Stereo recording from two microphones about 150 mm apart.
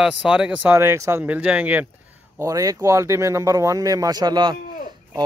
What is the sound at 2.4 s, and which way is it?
Speech, 25° right (ahead or behind).